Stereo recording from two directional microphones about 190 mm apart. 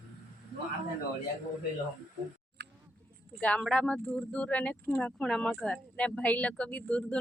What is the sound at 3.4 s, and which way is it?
Speech, 5° left (ahead or behind).